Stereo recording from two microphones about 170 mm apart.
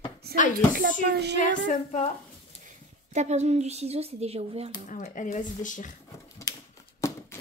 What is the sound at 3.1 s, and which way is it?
Speech, 40° right (ahead or behind).